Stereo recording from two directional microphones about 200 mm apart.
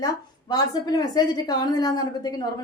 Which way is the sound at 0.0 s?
20° left (ahead or behind).